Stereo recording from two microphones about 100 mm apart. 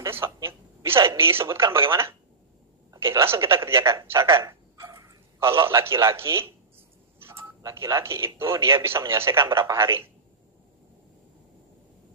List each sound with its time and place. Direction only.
0.0 s a woman's voice: 25° right (ahead or behind)